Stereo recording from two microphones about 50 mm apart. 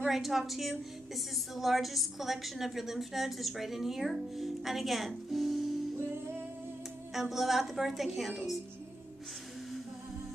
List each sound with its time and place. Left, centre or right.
0.0 s a woman's voice: centre
7.2 s a woman's voice: centre